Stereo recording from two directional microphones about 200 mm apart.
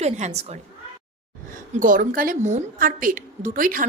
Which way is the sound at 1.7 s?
40° right (ahead or behind).